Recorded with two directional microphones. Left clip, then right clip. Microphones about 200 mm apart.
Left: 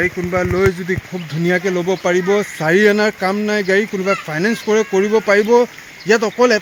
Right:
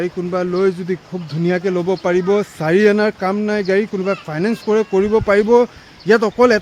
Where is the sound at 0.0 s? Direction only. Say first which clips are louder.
Left 3 dB; centre (ahead or behind).